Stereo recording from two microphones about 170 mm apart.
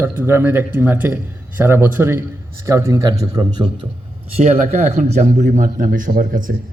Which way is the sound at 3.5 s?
35° right (ahead or behind).